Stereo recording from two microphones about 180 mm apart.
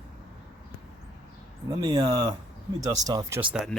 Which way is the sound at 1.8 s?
20° right (ahead or behind).